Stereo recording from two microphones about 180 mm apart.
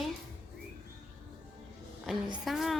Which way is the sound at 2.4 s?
Centre (ahead or behind).